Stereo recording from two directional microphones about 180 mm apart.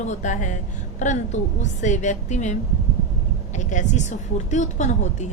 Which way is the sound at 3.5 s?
40° left (ahead or behind).